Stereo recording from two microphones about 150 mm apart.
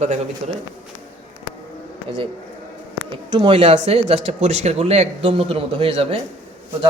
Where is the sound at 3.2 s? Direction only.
40° right (ahead or behind).